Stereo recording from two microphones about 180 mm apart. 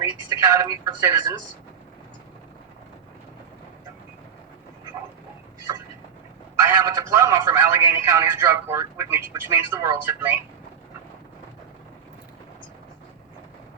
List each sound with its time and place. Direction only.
0.0 s speech: 15° right (ahead or behind)
6.6 s speech: 20° right (ahead or behind)